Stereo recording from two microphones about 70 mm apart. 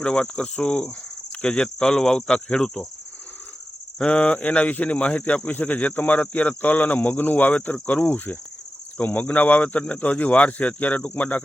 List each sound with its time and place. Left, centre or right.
0.0 s cricket: centre
3.9 s speech: centre